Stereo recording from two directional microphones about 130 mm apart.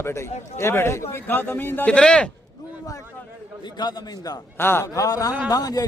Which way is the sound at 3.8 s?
30° left (ahead or behind).